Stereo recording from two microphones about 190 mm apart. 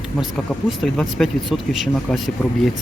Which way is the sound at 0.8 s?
Centre (ahead or behind).